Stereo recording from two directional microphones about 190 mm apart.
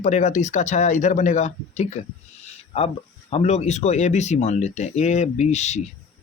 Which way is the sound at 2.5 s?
30° left (ahead or behind).